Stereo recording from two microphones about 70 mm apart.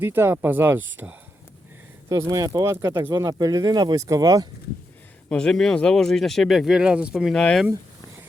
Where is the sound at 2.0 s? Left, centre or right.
Right.